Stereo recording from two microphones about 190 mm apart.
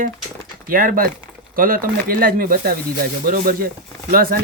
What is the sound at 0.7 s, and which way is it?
Speech, 45° right (ahead or behind).